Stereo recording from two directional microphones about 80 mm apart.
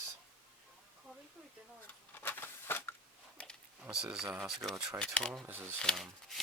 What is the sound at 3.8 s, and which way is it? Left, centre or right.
Speech, centre.